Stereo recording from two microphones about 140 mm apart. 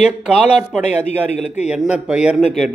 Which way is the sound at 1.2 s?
55° left (ahead or behind).